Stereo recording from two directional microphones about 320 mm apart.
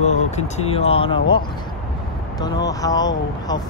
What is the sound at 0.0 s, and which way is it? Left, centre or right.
Speech, centre.